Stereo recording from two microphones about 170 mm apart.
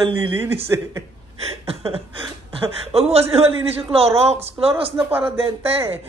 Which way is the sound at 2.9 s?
35° right (ahead or behind).